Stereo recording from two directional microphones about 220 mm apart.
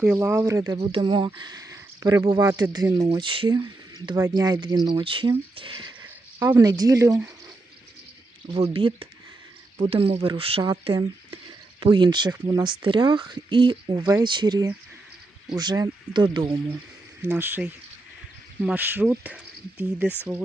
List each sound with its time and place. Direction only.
0.0 s speech: 5° right (ahead or behind)
8.5 s speech: 25° right (ahead or behind)
17.2 s speech: 10° right (ahead or behind)